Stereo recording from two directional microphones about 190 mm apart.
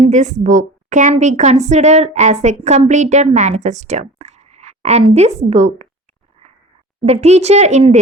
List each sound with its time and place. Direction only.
0.0 s a woman's voice: 40° right (ahead or behind)
7.0 s a woman's voice: 35° right (ahead or behind)